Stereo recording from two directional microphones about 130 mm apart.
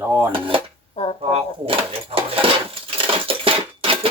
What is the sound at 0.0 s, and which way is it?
Speech, 20° right (ahead or behind).